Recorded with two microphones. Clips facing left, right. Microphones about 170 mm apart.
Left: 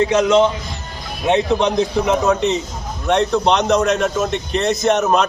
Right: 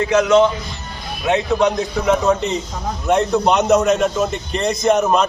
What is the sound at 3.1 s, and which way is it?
A man's voice, 5° right (ahead or behind).